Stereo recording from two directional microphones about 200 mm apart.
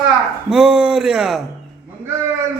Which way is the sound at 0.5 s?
5° right (ahead or behind).